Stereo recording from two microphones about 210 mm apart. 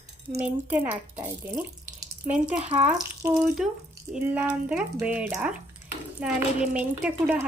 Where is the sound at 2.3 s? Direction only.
5° right (ahead or behind).